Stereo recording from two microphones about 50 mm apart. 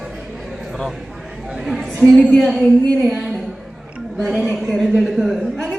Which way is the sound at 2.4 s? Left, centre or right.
Centre.